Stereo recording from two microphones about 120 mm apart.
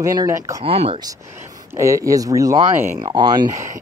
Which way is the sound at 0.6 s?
50° right (ahead or behind).